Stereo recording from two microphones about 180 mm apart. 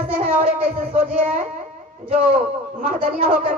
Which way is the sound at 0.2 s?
45° right (ahead or behind).